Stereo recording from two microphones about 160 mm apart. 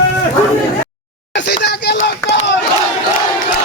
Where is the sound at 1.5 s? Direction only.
90° left.